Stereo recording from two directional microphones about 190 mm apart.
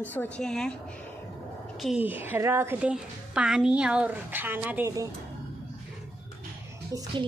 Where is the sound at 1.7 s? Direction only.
5° right (ahead or behind).